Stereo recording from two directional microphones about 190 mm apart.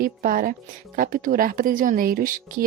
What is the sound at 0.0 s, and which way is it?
Speech, 45° right (ahead or behind).